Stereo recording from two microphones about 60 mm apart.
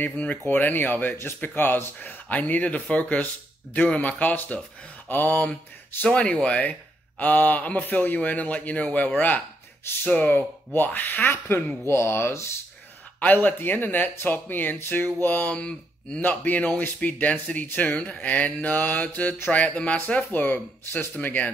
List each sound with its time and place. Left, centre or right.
0.0 s speech: left
6.0 s speech: centre; by 11.6 s left
11.9 s speech: left
13.2 s speech: left
15.5 s speech: centre